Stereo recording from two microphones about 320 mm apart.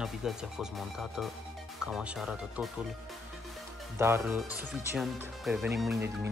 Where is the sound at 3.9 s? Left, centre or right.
Centre.